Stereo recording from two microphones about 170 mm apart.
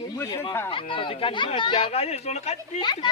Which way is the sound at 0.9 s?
30° left (ahead or behind).